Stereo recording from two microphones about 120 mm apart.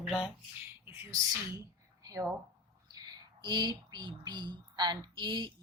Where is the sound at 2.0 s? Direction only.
30° right (ahead or behind).